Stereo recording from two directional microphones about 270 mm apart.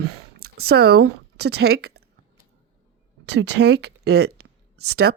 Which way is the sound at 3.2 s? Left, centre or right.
Right.